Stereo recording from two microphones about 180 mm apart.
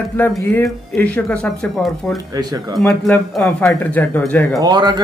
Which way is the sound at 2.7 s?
5° left (ahead or behind).